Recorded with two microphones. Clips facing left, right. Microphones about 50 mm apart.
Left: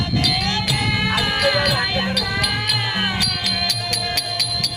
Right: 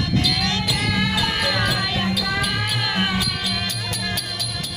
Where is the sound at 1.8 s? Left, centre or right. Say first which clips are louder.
Left 2 dB; left.